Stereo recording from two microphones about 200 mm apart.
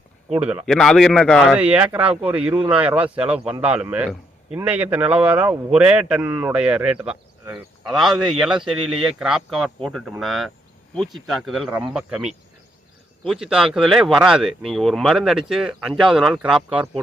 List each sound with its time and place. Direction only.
0.3 s a man's voice: 5° right (ahead or behind)